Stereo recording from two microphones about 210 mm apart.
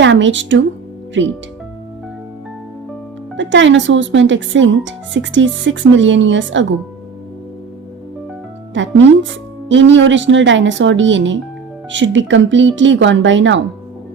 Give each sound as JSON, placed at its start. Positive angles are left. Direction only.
{"t": 0.0, "sound": "speech", "side_deg": -60}
{"t": 3.3, "sound": "speech", "side_deg": -60}
{"t": 8.7, "sound": "a woman's voice", "side_deg": -60}